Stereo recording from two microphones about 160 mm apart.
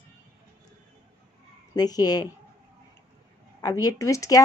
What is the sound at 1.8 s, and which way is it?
Speech, 25° left (ahead or behind).